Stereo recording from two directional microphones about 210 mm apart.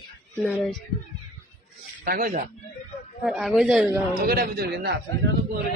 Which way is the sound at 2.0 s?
45° right (ahead or behind).